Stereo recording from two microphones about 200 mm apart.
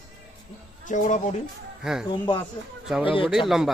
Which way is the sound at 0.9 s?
40° left (ahead or behind).